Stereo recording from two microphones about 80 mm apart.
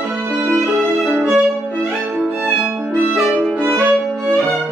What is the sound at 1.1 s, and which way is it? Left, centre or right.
Violin, right.